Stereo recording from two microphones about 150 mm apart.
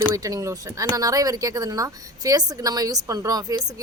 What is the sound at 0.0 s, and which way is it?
A woman's voice, 20° right (ahead or behind).